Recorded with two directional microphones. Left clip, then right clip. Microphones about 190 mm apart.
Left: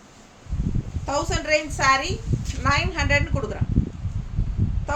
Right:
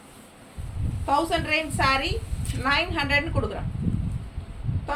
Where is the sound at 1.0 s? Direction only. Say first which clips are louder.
Right 2 dB; 15° left (ahead or behind).